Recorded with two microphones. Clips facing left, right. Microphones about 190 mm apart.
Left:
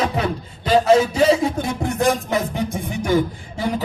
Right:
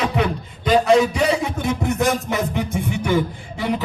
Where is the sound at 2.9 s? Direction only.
35° left (ahead or behind).